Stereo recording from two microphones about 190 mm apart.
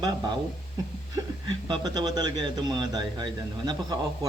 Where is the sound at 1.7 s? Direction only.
20° right (ahead or behind).